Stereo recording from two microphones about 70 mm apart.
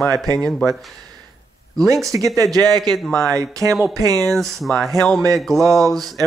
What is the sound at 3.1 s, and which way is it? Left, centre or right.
Speech, right.